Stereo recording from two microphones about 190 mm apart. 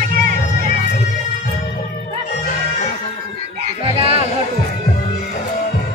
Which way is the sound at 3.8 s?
30° right (ahead or behind).